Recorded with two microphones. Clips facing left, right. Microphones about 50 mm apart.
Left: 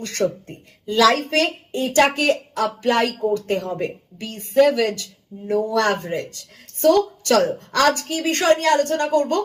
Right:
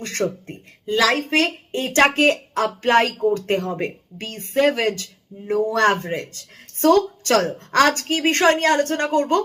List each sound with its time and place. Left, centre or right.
0.0 s speech: right